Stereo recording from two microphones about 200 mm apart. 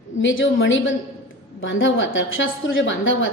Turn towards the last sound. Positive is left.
turn(degrees=70)  # may be behind; listen again after turning